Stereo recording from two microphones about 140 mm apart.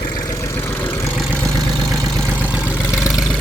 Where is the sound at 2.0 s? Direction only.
30° right (ahead or behind).